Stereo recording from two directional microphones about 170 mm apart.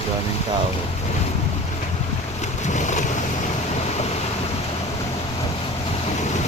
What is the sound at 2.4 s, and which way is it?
Boat, 45° left (ahead or behind).